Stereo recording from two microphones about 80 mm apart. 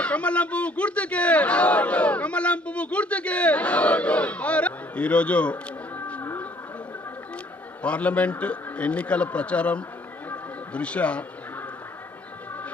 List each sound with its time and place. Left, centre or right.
0.0 s a man's voice: centre
7.8 s a man's voice: centre